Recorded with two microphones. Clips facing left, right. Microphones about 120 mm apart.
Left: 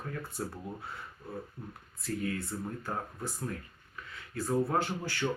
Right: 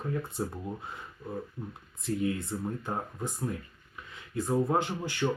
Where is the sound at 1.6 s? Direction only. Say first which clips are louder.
Right 5 dB; 5° right (ahead or behind).